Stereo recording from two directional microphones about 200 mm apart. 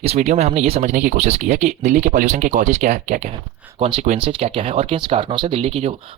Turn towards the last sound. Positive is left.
turn(degrees=-30)  # may be behind; listen again after turning